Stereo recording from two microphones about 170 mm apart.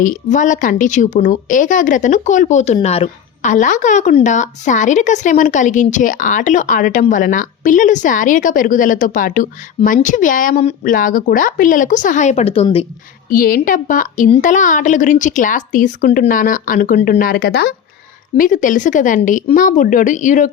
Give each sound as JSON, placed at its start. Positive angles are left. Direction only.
{"t": 0.0, "sound": "a woman's voice", "side_deg": 50}
{"t": 13.3, "sound": "a woman's voice", "side_deg": 55}
{"t": 18.3, "sound": "a woman's voice", "side_deg": 50}